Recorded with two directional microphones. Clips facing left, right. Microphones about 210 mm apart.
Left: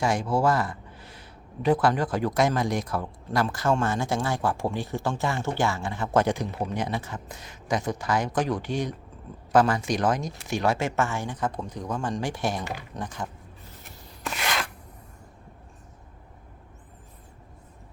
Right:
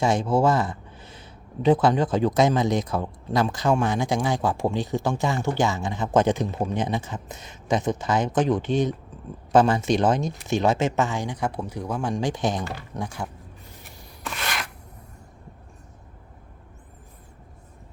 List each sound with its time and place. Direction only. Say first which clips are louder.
0.0 s speech: right 3 dB; 25° right (ahead or behind)